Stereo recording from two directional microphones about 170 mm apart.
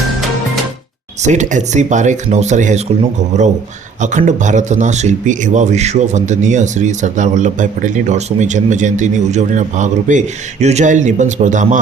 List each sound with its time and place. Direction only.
1.2 s a man's voice: 45° right (ahead or behind)